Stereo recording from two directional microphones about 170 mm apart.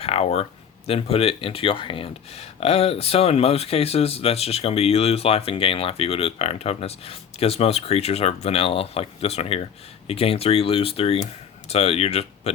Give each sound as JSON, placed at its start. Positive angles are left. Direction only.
{"t": 0.0, "sound": "speech", "side_deg": 35}